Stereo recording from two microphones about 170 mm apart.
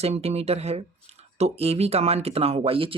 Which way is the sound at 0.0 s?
40° right (ahead or behind).